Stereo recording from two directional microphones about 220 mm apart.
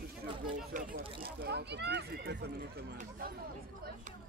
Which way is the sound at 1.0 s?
25° right (ahead or behind).